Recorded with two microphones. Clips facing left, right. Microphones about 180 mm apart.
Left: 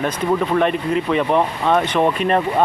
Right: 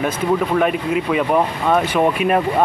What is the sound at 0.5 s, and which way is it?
Speech, 5° right (ahead or behind).